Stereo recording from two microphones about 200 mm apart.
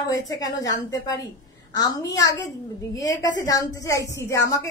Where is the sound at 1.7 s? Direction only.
20° left (ahead or behind).